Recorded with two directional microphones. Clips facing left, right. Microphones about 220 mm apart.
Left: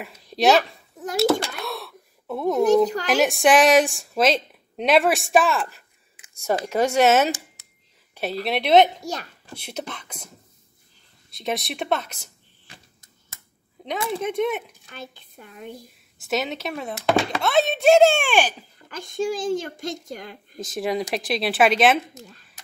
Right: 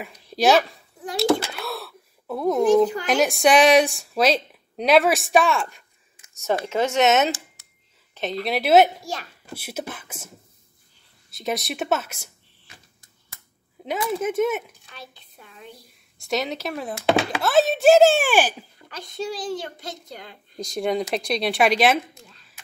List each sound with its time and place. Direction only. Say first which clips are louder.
0.0 s a woman's voice: even; centre (ahead or behind)
1.1 s a sound: even; centre (ahead or behind)
3.1 s a woman's voice: even; centre (ahead or behind)
8.1 s a sound: even; 10° left (ahead or behind)
8.5 s a woman's voice: even; 5° right (ahead or behind)
14.1 s a woman's voice: right 2 dB; 5° right (ahead or behind)
16.2 s a woman's voice: even; centre (ahead or behind)
18.9 s a child's voice: left 4 dB; 50° left (ahead or behind)
20.5 s a woman's voice: right 1 dB; 5° left (ahead or behind)